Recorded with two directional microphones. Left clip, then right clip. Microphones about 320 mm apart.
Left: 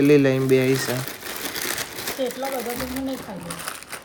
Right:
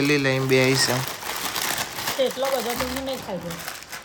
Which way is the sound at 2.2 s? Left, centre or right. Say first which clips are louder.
Right 4 dB; right.